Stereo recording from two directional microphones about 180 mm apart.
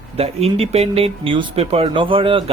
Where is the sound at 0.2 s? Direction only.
35° right (ahead or behind).